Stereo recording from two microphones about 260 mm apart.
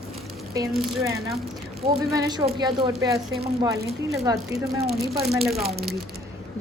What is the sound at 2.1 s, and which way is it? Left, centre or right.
A woman's voice, centre.